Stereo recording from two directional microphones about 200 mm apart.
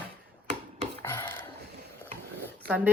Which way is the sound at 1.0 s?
10° left (ahead or behind).